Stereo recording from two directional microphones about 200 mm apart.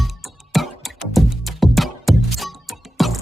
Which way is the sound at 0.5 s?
Centre (ahead or behind).